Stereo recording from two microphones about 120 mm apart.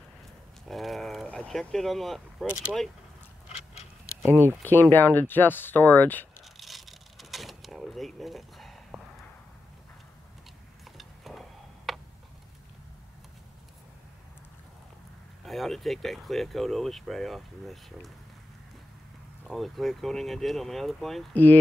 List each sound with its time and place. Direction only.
0.7 s a sound: centre (ahead or behind)
4.2 s speech: 20° right (ahead or behind)
4.6 s speech: 15° left (ahead or behind)
6.4 s a sound: centre (ahead or behind)
11.0 s tick-tock: centre (ahead or behind)
15.4 s speech: centre (ahead or behind)
19.4 s speech: centre (ahead or behind)
21.3 s speech: 15° left (ahead or behind)